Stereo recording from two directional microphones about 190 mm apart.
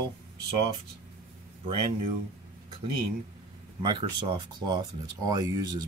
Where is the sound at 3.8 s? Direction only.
25° right (ahead or behind).